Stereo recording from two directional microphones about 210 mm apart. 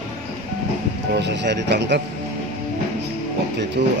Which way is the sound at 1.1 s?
55° right (ahead or behind).